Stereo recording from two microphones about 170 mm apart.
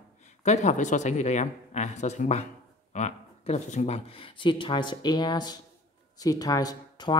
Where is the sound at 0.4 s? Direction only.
40° left (ahead or behind).